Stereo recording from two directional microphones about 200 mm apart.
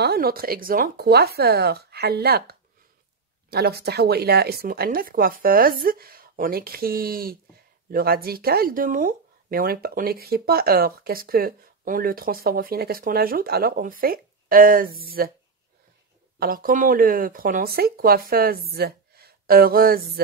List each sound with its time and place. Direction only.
0.0 s speech: 50° right (ahead or behind)
16.3 s speech: 45° right (ahead or behind)